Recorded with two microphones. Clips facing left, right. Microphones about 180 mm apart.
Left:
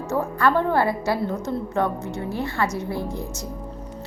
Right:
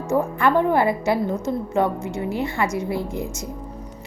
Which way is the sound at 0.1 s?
15° right (ahead or behind).